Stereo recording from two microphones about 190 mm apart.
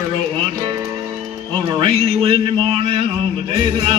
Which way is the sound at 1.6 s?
25° right (ahead or behind).